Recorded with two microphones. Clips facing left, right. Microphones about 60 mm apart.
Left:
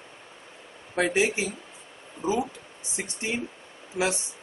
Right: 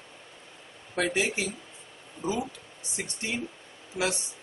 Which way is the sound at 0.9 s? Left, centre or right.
Centre.